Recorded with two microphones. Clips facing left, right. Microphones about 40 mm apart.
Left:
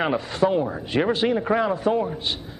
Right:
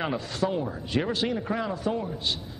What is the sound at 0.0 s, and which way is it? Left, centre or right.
A man's voice, left.